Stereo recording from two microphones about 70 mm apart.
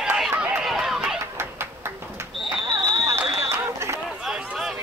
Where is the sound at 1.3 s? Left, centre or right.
Right.